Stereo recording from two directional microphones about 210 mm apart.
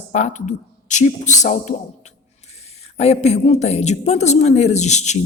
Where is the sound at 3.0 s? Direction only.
30° left (ahead or behind).